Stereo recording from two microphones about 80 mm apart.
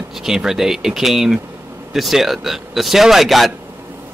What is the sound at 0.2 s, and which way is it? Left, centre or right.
Speech, centre.